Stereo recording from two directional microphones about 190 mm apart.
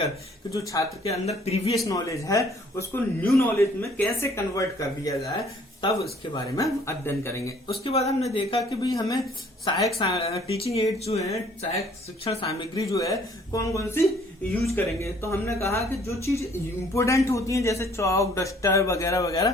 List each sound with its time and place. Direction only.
0.5 s a man's voice: 15° left (ahead or behind)
1.0 s speech: 35° left (ahead or behind)
1.8 s a man's voice: 15° left (ahead or behind)
7.9 s speech: 35° left (ahead or behind); by 9.2 s 20° left (ahead or behind)
10.0 s a man's voice: 30° left (ahead or behind)